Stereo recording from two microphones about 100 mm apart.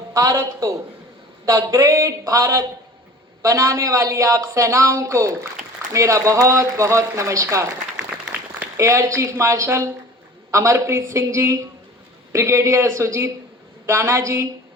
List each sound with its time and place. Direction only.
0.1 s speech: 35° right (ahead or behind)
7.9 s applause: 10° right (ahead or behind)
8.8 s speech: 30° right (ahead or behind)